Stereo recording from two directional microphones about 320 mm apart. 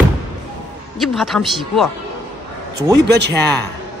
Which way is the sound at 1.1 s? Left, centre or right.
Centre.